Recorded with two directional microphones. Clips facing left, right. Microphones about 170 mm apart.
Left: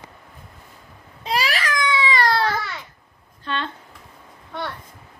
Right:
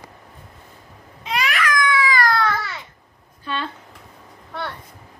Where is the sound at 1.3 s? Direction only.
30° left (ahead or behind).